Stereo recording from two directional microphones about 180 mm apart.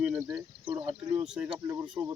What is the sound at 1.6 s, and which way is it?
Speech, 15° right (ahead or behind).